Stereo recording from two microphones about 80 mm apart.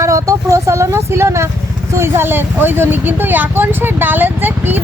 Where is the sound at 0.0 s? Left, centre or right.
Right.